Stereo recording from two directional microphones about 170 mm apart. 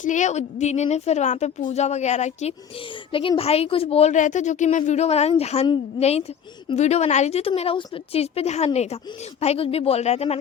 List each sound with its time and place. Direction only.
0.0 s a woman's voice: 45° left (ahead or behind)
3.1 s a woman's voice: 30° left (ahead or behind)